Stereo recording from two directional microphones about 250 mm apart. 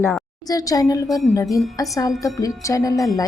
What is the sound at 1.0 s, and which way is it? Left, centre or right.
Speech, centre.